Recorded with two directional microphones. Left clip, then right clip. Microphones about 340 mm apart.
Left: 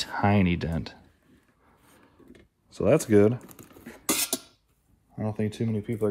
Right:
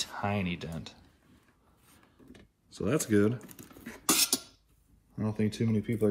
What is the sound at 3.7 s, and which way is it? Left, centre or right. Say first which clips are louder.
Beatboxing: even; centre.